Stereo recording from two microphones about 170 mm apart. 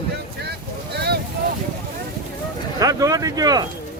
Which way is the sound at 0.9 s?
75° right (ahead or behind).